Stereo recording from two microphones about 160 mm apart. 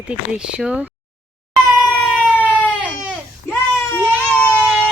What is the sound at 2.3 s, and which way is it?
Baby cry, 10° left (ahead or behind).